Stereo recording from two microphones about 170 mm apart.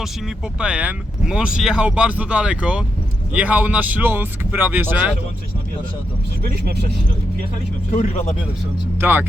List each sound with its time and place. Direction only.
0.6 s speech: 5° right (ahead or behind)
6.4 s speech: 65° right (ahead or behind)
7.9 s speech: 45° left (ahead or behind)
9.0 s speech: 10° right (ahead or behind)